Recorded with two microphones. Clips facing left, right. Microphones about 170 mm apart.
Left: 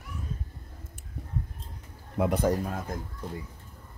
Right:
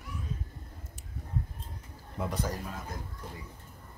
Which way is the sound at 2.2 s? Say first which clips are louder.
Left 9 dB; 60° left (ahead or behind).